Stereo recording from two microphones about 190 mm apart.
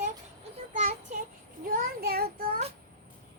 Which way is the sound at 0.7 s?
40° right (ahead or behind).